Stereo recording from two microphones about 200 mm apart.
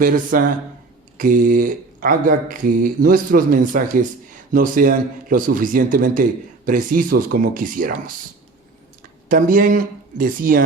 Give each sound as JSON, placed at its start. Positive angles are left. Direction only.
{"t": 0.0, "sound": "speech", "side_deg": -45}
{"t": 9.3, "sound": "speech", "side_deg": -45}